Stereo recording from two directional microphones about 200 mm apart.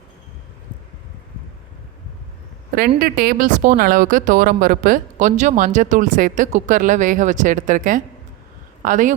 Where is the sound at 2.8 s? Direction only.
50° right (ahead or behind).